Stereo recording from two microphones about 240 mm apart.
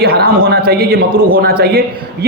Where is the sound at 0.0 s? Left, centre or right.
Right.